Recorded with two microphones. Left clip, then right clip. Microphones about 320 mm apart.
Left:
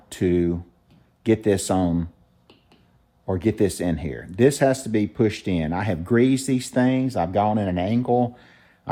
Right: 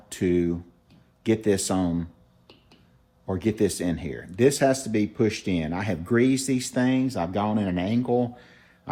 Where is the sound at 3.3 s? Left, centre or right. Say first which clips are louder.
Left 3 dB; left.